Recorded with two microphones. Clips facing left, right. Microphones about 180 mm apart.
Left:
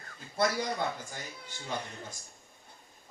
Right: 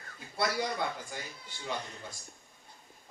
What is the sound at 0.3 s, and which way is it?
Speech, 45° left (ahead or behind).